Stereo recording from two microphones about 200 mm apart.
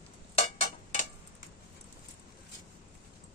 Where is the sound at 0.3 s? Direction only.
35° left (ahead or behind).